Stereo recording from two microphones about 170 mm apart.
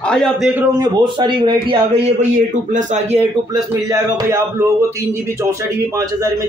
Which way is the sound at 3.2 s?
20° right (ahead or behind).